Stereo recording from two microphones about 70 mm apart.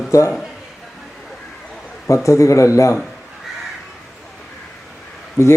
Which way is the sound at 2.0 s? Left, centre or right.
Left.